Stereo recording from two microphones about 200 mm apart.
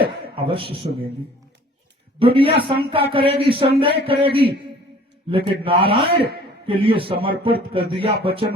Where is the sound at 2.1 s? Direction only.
25° right (ahead or behind).